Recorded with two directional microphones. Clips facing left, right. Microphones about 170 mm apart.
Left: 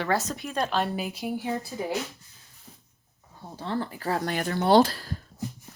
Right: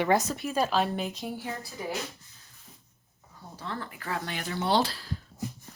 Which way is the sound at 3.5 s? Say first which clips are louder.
Left 7 dB; 30° left (ahead or behind).